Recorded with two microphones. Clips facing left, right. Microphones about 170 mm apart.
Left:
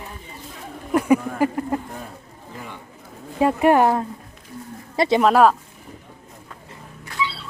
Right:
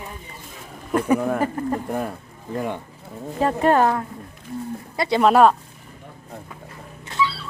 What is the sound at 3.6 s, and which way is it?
Speech, 15° left (ahead or behind).